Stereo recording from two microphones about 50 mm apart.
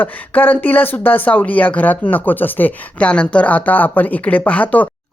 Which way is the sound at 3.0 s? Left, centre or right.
Left.